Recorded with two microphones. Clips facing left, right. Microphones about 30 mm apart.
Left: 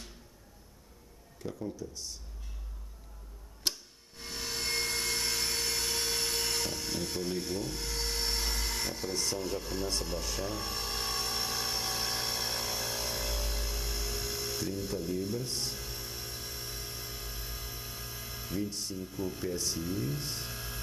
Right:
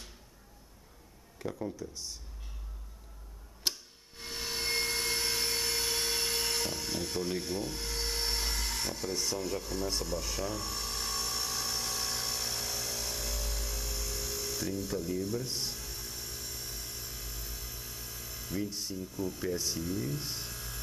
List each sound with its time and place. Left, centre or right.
1.4 s speech: right
1.7 s speech: centre
3.6 s tick-tock: centre
4.2 s a sound: centre
10.4 s dental drill: centre
14.9 s speech: centre
15.4 s speech: centre
15.8 s a sound: centre
18.6 s speech: centre
18.9 s speech: centre
19.4 s speech: centre
19.9 s speech: centre
20.2 s speech: centre
20.4 s a sound: centre